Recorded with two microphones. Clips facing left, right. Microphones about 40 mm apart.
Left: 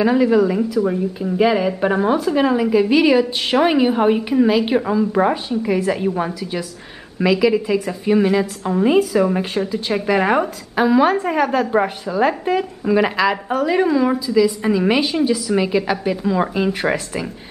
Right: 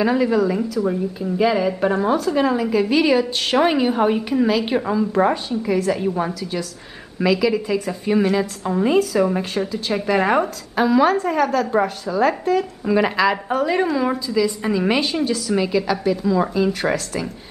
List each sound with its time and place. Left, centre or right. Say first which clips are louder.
0.0 s a woman's voice: left 3 dB; centre
12.8 s a woman's voice: left 2 dB; centre